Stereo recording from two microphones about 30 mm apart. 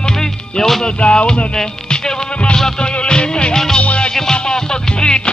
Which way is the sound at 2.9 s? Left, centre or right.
Left.